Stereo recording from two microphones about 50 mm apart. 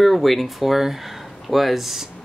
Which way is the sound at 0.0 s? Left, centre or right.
Centre.